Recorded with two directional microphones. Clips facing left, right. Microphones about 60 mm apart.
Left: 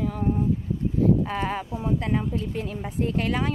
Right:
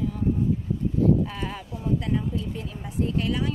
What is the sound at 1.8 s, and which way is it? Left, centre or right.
A woman's voice, left.